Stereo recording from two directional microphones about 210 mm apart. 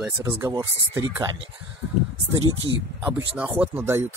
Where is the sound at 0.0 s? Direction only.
15° right (ahead or behind).